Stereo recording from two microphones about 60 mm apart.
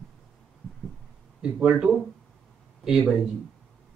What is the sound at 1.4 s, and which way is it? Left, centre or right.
Speech, centre.